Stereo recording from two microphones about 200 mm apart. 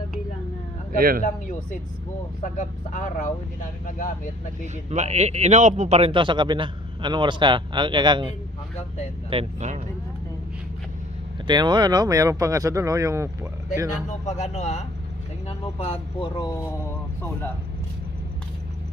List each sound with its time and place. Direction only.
0.9 s speech: 45° right (ahead or behind)
1.2 s speech: 40° left (ahead or behind)
4.9 s a man's voice: 35° right (ahead or behind)
11.4 s speech: 20° right (ahead or behind)
14.2 s speech: 35° left (ahead or behind)